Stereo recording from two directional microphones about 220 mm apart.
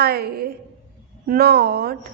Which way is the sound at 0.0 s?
45° right (ahead or behind).